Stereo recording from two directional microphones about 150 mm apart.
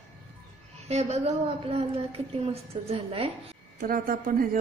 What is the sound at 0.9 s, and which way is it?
A woman's voice, 45° right (ahead or behind).